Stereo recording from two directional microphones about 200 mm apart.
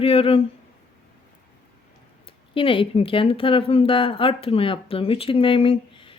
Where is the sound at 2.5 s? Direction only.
25° left (ahead or behind).